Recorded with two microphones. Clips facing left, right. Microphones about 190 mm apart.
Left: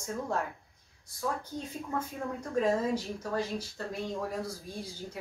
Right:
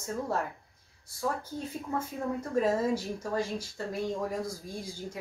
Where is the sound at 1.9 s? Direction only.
5° right (ahead or behind).